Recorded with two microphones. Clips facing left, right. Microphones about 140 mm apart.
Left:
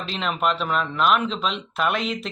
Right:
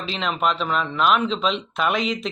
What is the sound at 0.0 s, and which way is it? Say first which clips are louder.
Speech: right 1 dB; centre (ahead or behind).